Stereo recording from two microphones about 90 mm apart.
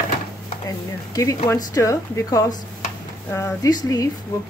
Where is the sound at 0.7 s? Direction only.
40° left (ahead or behind).